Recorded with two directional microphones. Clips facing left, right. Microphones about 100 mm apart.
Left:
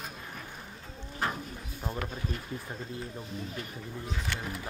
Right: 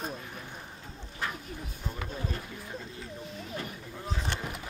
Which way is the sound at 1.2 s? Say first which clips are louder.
Left 3 dB; 40° left (ahead or behind).